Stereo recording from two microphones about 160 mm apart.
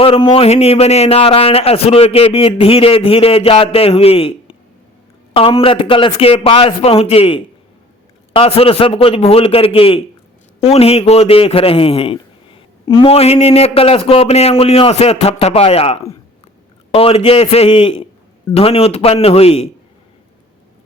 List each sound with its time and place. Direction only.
0.0 s speech: 35° left (ahead or behind)